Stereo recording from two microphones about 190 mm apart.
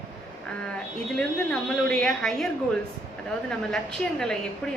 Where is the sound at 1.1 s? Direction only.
5° left (ahead or behind).